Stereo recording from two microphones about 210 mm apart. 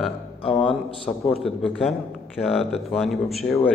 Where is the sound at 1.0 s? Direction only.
30° left (ahead or behind).